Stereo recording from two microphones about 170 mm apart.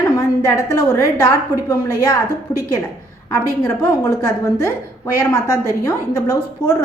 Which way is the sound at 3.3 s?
15° left (ahead or behind).